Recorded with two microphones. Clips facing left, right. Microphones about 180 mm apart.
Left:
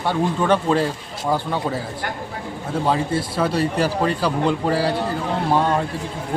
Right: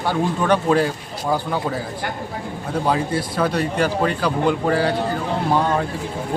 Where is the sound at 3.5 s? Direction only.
35° left (ahead or behind).